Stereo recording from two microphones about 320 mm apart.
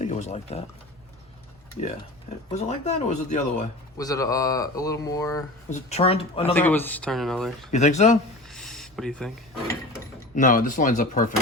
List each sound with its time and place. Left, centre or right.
0.0 s speech: left
2.6 s speech: left
3.9 s speech: centre
6.5 s speech: centre
7.7 s speech: left
8.4 s a sound: centre
10.3 s speech: left